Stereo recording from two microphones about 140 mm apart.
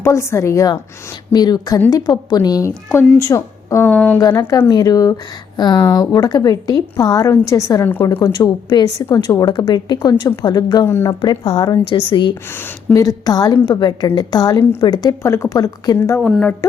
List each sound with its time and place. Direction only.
0.0 s a woman's voice: 20° left (ahead or behind)
3.9 s speech: 10° left (ahead or behind)
4.2 s a woman's voice: 25° left (ahead or behind)
8.2 s a woman's voice: 30° left (ahead or behind)
10.8 s speech: 15° left (ahead or behind)
11.2 s a woman's voice: 35° left (ahead or behind)
12.5 s a woman's voice: 15° left (ahead or behind)
16.2 s speech: 5° left (ahead or behind)